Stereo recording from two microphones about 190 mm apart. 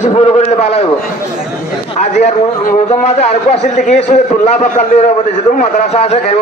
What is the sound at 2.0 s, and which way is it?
A man's voice, 35° left (ahead or behind).